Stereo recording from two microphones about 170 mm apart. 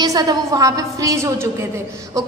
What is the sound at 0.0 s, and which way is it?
A woman's voice, 20° right (ahead or behind).